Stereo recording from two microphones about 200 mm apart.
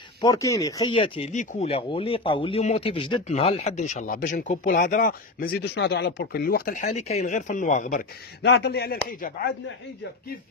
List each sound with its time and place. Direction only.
0.2 s speech: 15° left (ahead or behind); by 8.0 s 40° left (ahead or behind)
8.4 s speech: 55° left (ahead or behind)